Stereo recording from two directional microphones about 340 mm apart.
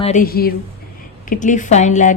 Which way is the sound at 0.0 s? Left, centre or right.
Left.